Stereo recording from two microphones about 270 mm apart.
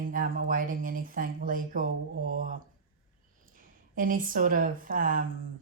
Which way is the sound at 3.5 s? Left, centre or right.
Right.